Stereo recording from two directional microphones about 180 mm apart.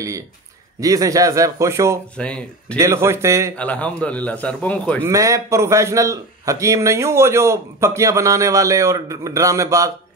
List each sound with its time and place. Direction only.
0.7 s a man's voice: 20° right (ahead or behind)
2.1 s speech: 5° left (ahead or behind)
2.8 s a man's voice: 15° right (ahead or behind)
3.5 s a man's voice: 5° left (ahead or behind)
5.0 s a man's voice: 15° right (ahead or behind)